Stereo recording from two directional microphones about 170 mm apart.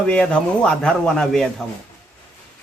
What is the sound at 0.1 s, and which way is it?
Speech, 5° left (ahead or behind).